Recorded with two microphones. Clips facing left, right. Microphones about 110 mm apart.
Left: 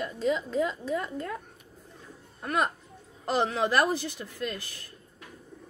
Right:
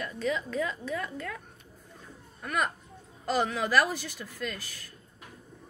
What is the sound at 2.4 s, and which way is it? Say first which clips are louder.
A woman's voice: left 3 dB; 30° left (ahead or behind).